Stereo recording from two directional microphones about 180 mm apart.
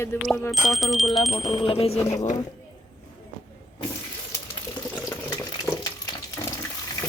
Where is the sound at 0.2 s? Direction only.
Centre (ahead or behind).